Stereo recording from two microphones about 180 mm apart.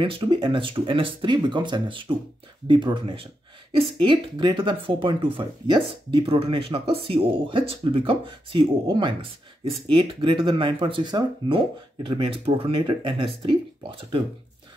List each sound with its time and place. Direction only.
0.0 s speech: 30° right (ahead or behind)